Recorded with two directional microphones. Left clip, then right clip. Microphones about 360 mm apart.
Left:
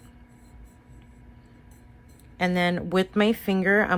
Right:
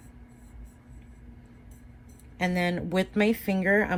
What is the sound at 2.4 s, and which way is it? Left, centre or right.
Speech, centre.